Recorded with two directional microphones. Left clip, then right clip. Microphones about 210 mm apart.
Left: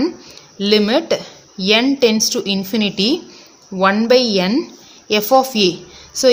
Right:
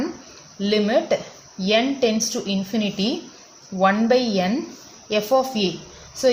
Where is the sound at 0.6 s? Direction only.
45° left (ahead or behind).